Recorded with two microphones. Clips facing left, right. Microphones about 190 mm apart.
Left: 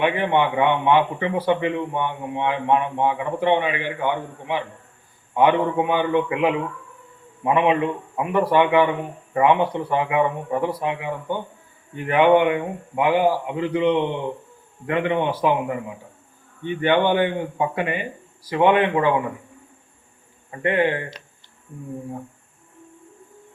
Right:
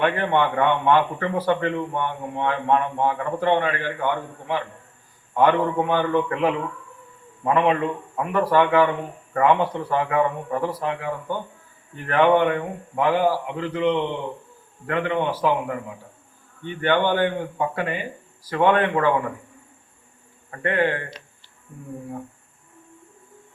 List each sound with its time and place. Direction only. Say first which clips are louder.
0.0 s a man's voice: left 1 dB; 10° left (ahead or behind)
20.5 s a man's voice: left 2 dB; 15° left (ahead or behind)